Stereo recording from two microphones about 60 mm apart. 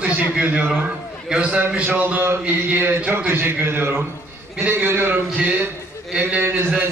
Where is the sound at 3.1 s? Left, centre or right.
Right.